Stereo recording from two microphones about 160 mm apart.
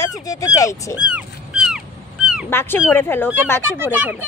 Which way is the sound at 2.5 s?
15° left (ahead or behind).